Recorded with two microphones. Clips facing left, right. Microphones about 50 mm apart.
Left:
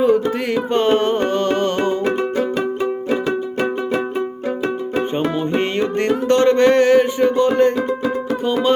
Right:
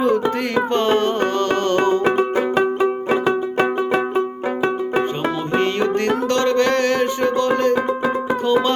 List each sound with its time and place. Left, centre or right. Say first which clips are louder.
0.0 s music: left 2 dB; centre
2.0 s music: right 2 dB; right
6.2 s music: left 7 dB; left